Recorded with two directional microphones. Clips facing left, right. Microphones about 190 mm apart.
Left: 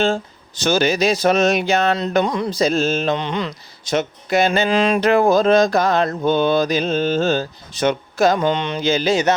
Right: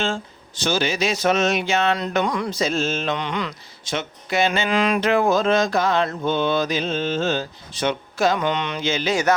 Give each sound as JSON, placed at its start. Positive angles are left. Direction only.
{"t": 0.0, "sound": "mantra", "side_deg": 40}
{"t": 2.2, "sound": "speech", "side_deg": 25}
{"t": 2.6, "sound": "mantra", "side_deg": 35}
{"t": 3.8, "sound": "mantra", "side_deg": 40}
{"t": 4.7, "sound": "mantra", "side_deg": 25}
{"t": 8.4, "sound": "mantra", "side_deg": 30}